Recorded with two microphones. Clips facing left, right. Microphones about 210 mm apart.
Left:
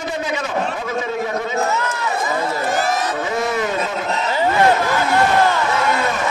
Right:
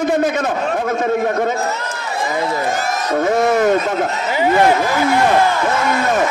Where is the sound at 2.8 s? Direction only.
45° right (ahead or behind).